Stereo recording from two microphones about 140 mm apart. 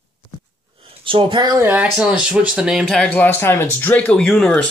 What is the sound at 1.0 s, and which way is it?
Speech, 35° right (ahead or behind).